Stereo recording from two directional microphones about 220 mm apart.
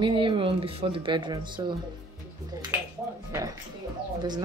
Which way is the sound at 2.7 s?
10° right (ahead or behind).